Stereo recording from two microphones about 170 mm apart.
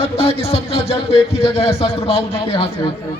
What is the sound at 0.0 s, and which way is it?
Speech, 35° left (ahead or behind).